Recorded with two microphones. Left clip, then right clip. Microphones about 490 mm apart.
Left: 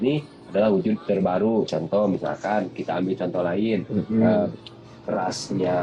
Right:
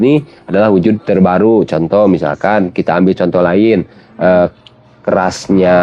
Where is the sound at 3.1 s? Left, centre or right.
Right.